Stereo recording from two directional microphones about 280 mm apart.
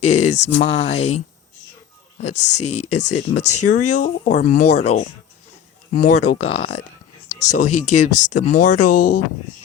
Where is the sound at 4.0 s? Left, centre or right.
Left.